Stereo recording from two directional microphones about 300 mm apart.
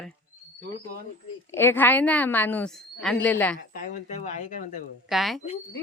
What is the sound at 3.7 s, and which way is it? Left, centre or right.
Speech, left.